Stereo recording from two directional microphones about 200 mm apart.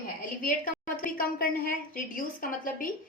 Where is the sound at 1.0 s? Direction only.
45° left (ahead or behind).